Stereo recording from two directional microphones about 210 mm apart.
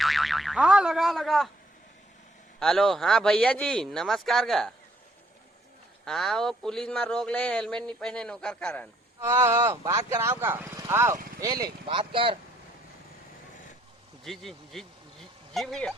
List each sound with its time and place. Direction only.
0.0 s speech: centre (ahead or behind)
2.6 s a man's voice: centre (ahead or behind)
6.1 s a man's voice: centre (ahead or behind)
9.2 s speech: 15° right (ahead or behind)
14.3 s a man's voice: centre (ahead or behind)